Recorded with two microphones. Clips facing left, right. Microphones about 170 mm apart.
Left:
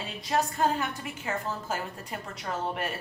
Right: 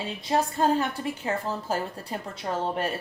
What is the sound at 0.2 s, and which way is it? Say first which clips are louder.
A woman's voice: right 2 dB; 25° right (ahead or behind).